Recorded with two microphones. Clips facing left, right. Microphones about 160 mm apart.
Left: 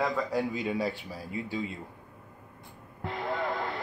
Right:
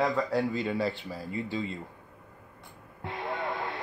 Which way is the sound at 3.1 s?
30° left (ahead or behind).